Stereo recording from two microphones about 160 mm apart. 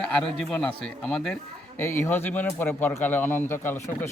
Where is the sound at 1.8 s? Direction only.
15° left (ahead or behind).